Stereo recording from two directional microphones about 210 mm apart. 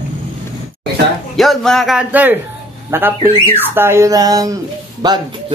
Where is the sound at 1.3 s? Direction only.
Centre (ahead or behind).